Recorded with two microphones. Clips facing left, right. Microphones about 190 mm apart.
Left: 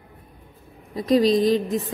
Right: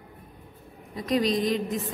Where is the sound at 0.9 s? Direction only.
35° left (ahead or behind).